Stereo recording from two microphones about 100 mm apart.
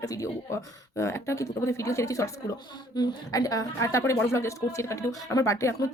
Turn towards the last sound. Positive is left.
turn(degrees=30)  # may be behind; listen again after turning